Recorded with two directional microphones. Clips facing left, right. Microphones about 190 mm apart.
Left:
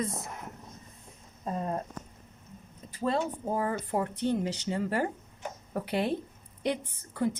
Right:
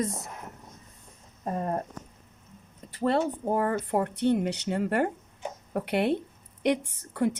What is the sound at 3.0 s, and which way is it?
A woman's voice, 65° right (ahead or behind).